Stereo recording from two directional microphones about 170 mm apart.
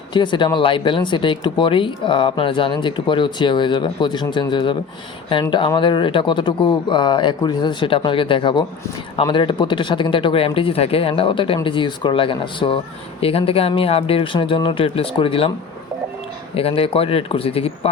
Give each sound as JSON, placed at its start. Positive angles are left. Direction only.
{"t": 0.1, "sound": "speech", "side_deg": 25}
{"t": 16.6, "sound": "speech", "side_deg": 35}